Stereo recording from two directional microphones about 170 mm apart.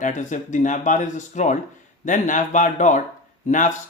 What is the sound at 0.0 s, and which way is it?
Speech, 50° left (ahead or behind).